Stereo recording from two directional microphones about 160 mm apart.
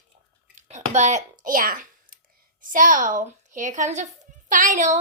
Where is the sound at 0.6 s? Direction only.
45° right (ahead or behind); by 2.2 s 60° right (ahead or behind).